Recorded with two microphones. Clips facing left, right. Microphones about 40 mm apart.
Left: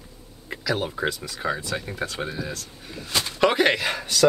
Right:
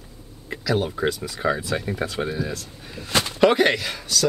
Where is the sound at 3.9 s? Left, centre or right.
Left.